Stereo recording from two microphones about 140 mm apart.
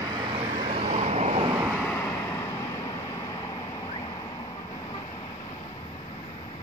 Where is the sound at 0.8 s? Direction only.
50° right (ahead or behind).